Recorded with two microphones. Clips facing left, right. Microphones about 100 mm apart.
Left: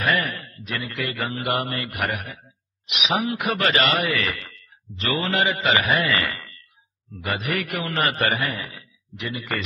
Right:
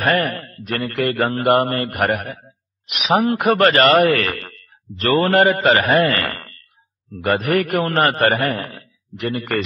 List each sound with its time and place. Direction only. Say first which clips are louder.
0.0 s a man's voice: right 5 dB; 50° right (ahead or behind)